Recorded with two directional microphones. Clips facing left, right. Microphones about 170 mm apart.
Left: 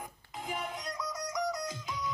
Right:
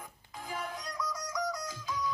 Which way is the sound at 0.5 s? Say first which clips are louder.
Even; 20° left (ahead or behind).